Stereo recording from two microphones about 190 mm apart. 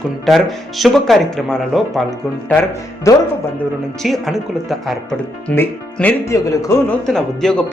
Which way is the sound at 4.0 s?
Centre (ahead or behind).